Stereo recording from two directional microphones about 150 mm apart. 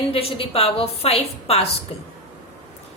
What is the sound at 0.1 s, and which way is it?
A woman's voice, 40° left (ahead or behind).